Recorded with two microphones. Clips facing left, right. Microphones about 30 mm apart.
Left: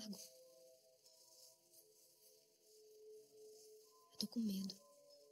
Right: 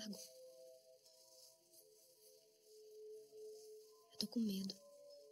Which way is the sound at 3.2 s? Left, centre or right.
Right.